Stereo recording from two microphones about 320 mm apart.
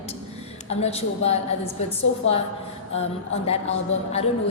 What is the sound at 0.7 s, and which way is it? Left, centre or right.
Speech, centre.